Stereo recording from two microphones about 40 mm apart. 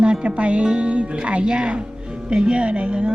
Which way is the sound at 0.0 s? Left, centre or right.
Right.